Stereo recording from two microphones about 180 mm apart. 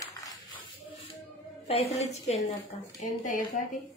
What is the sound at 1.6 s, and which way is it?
A woman's voice, 35° left (ahead or behind).